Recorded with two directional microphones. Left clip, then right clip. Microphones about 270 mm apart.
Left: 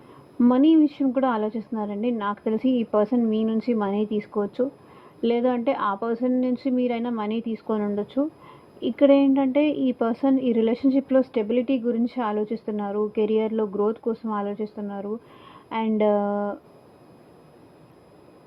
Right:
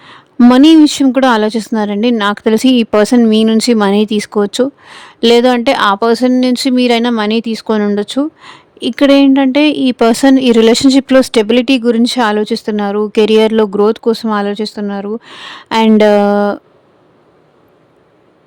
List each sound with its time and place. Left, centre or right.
0.3 s speech: right